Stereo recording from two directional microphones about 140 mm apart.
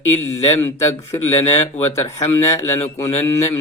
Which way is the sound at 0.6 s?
20° left (ahead or behind).